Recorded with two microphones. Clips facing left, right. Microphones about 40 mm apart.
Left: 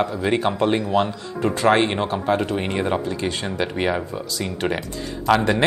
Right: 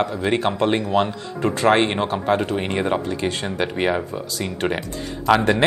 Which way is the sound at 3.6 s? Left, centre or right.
Right.